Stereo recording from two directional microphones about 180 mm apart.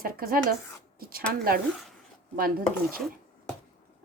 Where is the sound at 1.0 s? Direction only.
55° right (ahead or behind).